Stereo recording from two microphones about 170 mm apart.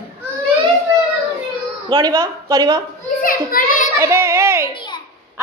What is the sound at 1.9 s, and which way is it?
Speech, 25° right (ahead or behind).